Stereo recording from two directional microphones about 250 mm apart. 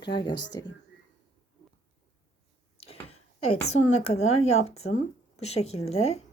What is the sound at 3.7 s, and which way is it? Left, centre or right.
A woman's voice, left.